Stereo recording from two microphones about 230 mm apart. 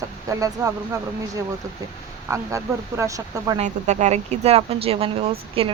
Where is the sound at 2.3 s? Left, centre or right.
Centre.